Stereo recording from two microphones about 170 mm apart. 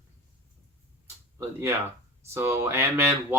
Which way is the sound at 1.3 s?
15° right (ahead or behind).